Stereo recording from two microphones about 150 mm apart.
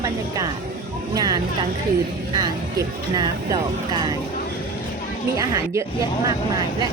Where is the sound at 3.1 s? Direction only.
25° right (ahead or behind).